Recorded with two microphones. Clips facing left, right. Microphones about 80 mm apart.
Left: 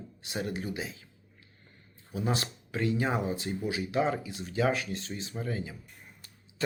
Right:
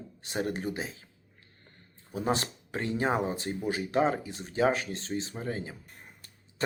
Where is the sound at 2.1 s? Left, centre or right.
Right.